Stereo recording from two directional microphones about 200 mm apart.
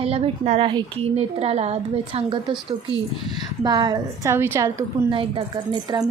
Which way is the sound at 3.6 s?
20° right (ahead or behind).